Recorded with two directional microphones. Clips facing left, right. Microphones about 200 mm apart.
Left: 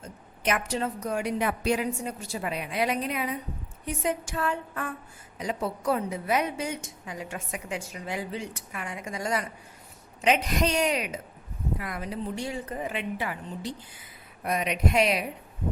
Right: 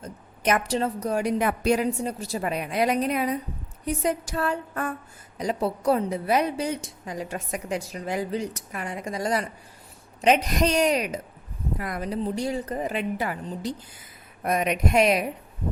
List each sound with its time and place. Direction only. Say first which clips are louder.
0.0 s a woman's voice: right 3 dB; 40° right (ahead or behind)